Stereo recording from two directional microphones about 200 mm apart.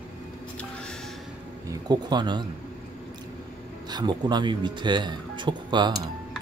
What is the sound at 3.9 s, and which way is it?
Speech, 20° right (ahead or behind).